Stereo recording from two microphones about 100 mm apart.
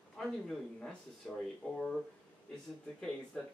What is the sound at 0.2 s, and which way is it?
Speech, 5° left (ahead or behind).